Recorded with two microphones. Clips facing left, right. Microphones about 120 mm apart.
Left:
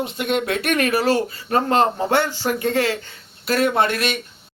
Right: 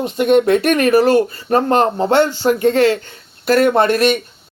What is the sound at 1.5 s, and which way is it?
Speech, 35° right (ahead or behind).